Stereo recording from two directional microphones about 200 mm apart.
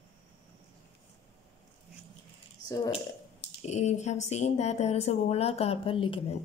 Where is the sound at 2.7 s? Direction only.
20° left (ahead or behind).